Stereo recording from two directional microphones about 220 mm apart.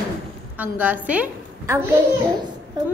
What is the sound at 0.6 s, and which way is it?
A woman's voice, 5° right (ahead or behind).